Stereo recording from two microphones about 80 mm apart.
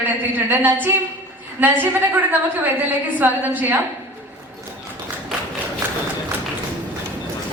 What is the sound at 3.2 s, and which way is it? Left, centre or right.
Speech, right.